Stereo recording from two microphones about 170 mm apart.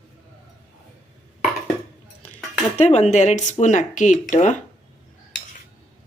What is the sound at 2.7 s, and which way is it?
Speech, 40° left (ahead or behind).